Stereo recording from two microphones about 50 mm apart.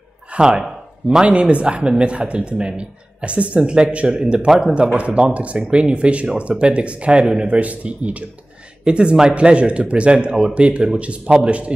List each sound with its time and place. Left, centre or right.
0.3 s a sound: centre
1.2 s speech: right; by 4.7 s centre
4.7 s speech: right